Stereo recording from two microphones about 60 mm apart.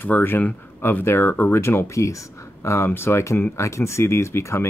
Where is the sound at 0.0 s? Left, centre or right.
Left.